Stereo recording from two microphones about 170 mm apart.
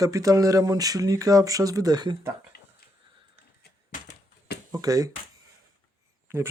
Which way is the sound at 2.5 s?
70° left (ahead or behind).